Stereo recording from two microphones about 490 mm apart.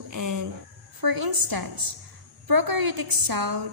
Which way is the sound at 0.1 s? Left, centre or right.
Right.